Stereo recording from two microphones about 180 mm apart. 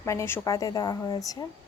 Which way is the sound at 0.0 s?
15° left (ahead or behind).